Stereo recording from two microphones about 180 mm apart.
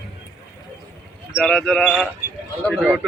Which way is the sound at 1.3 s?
5° left (ahead or behind).